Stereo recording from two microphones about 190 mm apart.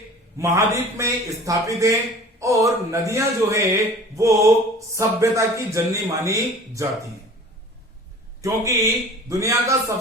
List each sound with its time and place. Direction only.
0.3 s a man's voice: 15° right (ahead or behind)
8.4 s a man's voice: 15° right (ahead or behind)